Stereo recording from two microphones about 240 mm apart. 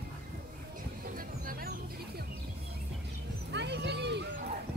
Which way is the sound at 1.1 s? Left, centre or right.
Right.